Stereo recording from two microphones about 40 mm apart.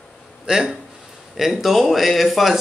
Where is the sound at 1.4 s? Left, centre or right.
Centre.